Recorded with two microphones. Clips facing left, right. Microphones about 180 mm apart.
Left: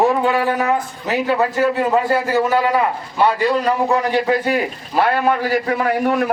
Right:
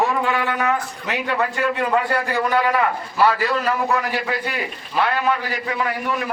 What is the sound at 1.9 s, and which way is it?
A man's voice, 20° left (ahead or behind).